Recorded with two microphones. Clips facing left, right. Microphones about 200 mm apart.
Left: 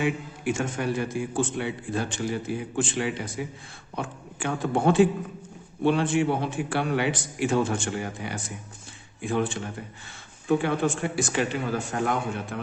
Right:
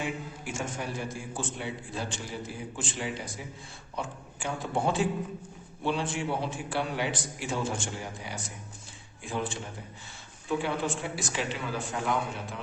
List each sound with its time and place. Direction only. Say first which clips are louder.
0.0 s a man's voice: left 8 dB; 65° left (ahead or behind)
10.5 s speech: left 6 dB; 55° left (ahead or behind)